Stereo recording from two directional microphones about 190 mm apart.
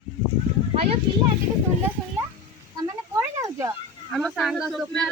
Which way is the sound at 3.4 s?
15° right (ahead or behind).